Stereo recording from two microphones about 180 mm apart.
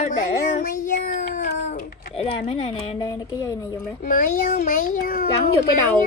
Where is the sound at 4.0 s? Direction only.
50° left (ahead or behind).